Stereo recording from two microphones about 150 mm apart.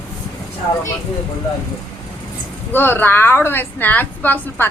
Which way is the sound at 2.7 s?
15° left (ahead or behind).